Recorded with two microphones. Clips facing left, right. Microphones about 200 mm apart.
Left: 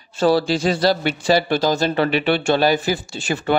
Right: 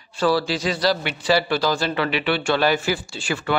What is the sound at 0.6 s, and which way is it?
Speech, 50° left (ahead or behind).